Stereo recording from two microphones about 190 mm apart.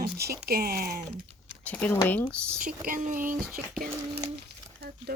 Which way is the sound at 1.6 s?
5° left (ahead or behind).